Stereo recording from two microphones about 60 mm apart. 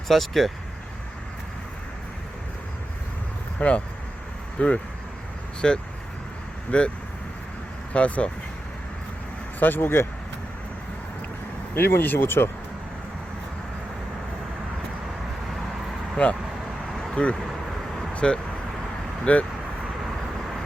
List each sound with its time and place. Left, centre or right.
0.1 s speech: centre
3.6 s speech: left
5.6 s speech: centre
7.9 s speech: left
9.6 s speech: left
11.7 s speech: left
16.2 s speech: left
18.1 s vehicle: centre